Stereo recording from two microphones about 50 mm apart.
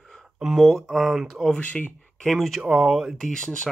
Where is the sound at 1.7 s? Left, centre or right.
Left.